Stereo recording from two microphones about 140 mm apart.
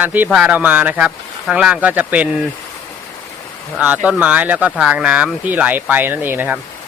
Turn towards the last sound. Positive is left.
turn(degrees=-15)  # may be behind; listen again after turning